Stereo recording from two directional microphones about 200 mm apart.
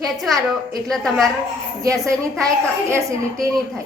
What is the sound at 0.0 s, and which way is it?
Speech, centre (ahead or behind).